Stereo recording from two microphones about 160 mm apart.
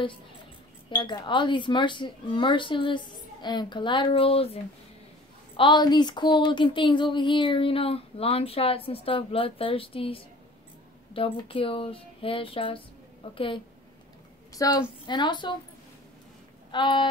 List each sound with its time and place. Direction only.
0.8 s speech: 30° left (ahead or behind)
5.6 s speech: 30° left (ahead or behind)
14.5 s a woman's voice: 20° left (ahead or behind)
16.7 s speech: 30° left (ahead or behind)